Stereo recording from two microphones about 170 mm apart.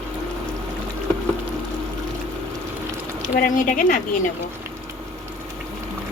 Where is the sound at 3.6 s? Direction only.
50° left (ahead or behind).